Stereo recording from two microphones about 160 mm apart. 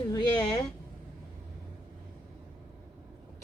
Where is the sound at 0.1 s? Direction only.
25° left (ahead or behind).